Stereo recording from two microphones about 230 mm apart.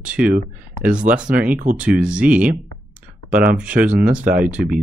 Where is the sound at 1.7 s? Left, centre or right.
Centre.